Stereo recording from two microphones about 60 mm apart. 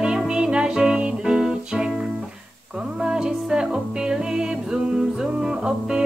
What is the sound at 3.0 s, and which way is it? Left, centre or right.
Music, centre.